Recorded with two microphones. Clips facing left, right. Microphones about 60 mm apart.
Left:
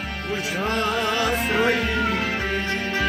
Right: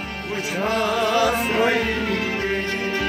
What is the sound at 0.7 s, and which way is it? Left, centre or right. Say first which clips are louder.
Music: right 5 dB; right.